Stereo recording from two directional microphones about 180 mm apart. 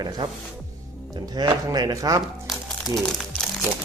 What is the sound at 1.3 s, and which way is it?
Speech, 25° right (ahead or behind).